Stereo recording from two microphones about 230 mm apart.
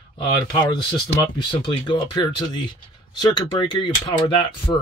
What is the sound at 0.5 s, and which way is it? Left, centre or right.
Speech, centre.